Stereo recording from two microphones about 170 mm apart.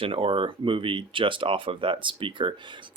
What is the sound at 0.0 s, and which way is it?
Speech, 30° right (ahead or behind).